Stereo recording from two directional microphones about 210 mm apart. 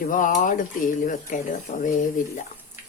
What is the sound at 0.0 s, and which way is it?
Speech, 40° left (ahead or behind).